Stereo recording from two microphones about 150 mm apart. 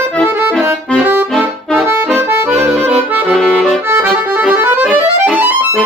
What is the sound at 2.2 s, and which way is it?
Accordion, 10° right (ahead or behind).